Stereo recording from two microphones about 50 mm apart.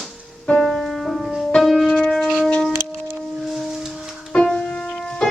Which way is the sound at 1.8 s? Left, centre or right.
Centre.